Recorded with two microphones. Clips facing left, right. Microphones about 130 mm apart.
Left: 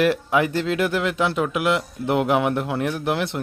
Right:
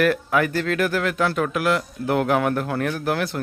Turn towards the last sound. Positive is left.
turn(degrees=25)  # may be behind; listen again after turning